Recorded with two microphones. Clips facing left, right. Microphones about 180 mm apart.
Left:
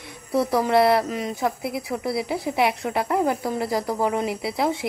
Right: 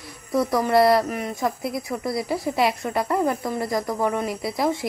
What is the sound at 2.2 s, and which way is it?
A woman's voice, centre (ahead or behind).